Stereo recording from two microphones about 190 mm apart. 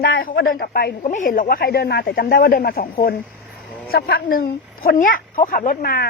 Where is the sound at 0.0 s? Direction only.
55° left (ahead or behind).